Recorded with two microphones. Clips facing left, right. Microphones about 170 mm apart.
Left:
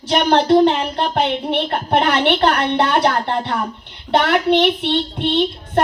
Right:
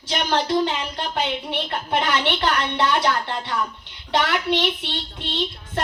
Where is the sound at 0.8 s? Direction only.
55° left (ahead or behind).